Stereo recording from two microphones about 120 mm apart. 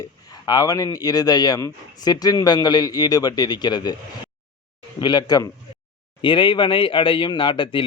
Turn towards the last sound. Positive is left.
turn(degrees=45)  # may be behind; listen again after turning